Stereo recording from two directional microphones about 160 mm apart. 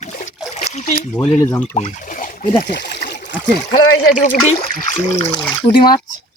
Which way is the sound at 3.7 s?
55° left (ahead or behind).